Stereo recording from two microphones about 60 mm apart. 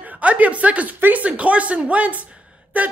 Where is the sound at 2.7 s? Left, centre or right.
Right.